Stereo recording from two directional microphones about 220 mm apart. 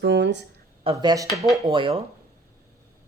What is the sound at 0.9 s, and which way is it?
Speech, 15° right (ahead or behind).